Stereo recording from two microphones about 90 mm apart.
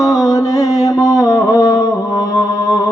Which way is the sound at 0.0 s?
40° left (ahead or behind).